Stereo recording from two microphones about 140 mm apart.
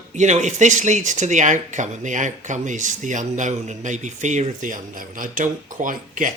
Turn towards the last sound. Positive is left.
turn(degrees=-70)  # may be behind; listen again after turning